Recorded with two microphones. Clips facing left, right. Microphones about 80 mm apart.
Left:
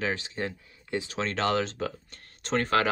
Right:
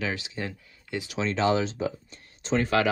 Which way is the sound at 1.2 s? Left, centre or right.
Left.